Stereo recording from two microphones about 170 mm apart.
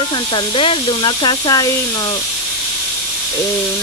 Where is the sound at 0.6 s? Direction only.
30° left (ahead or behind).